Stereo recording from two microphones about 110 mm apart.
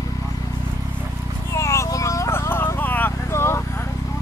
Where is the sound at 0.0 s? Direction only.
30° left (ahead or behind).